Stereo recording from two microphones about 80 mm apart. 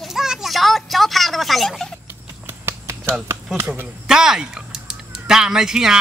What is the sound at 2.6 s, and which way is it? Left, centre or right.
Finger snapping, right.